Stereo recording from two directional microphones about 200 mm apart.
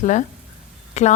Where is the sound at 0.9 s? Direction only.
35° left (ahead or behind).